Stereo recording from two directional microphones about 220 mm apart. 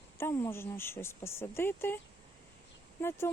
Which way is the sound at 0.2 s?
10° left (ahead or behind).